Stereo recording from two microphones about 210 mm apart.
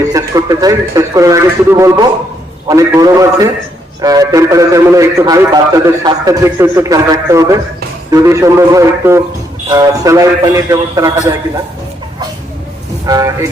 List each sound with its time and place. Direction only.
0.1 s speech: 15° right (ahead or behind)
13.1 s speech: 15° right (ahead or behind)